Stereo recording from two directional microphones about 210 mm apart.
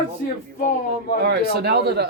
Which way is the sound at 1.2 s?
50° right (ahead or behind).